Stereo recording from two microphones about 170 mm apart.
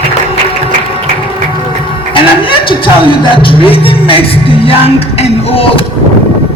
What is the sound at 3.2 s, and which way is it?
Music, 30° left (ahead or behind).